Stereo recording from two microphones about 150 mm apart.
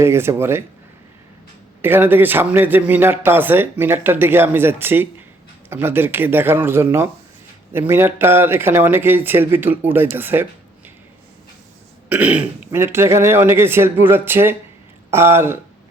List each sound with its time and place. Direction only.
0.0 s a man's voice: 15° right (ahead or behind)
1.8 s a man's voice: 15° right (ahead or behind)
12.0 s a man's voice: 10° right (ahead or behind)